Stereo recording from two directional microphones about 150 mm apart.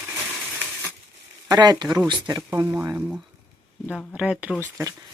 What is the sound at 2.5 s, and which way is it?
Speech, 15° right (ahead or behind).